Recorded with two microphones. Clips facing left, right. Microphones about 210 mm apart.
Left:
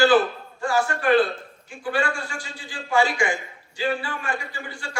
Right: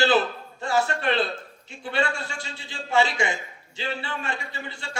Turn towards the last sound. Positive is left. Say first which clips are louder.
# left 1 dB
turn(degrees=-25)  # may be behind; listen again after turning